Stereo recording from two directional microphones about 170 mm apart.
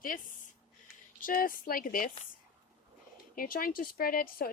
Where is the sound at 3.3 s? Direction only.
60° left (ahead or behind).